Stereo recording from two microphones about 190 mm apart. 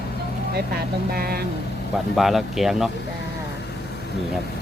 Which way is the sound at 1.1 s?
55° right (ahead or behind).